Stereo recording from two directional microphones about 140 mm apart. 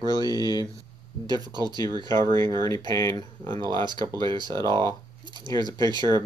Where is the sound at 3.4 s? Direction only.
35° right (ahead or behind).